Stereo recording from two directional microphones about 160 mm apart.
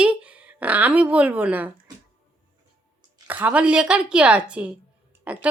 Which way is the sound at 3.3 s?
10° right (ahead or behind).